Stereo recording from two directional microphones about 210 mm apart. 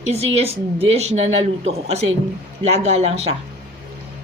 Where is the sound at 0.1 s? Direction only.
30° right (ahead or behind).